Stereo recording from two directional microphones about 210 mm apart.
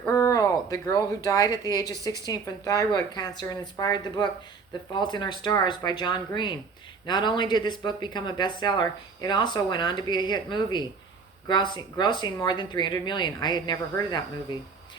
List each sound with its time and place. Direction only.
0.1 s speech: 15° left (ahead or behind)